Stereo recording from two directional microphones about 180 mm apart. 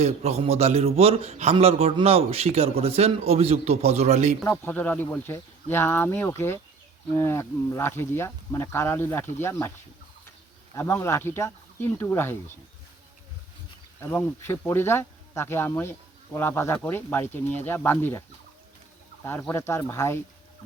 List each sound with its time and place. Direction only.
0.0 s a man's voice: 35° right (ahead or behind)
4.4 s speech: 10° left (ahead or behind)
10.8 s speech: 15° left (ahead or behind)
14.0 s speech: 10° left (ahead or behind)
19.2 s speech: 10° left (ahead or behind)